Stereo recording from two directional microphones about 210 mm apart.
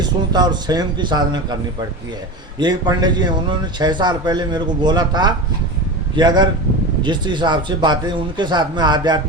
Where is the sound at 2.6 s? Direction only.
20° right (ahead or behind).